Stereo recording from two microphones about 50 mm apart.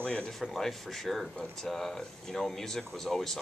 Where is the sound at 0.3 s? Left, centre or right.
Centre.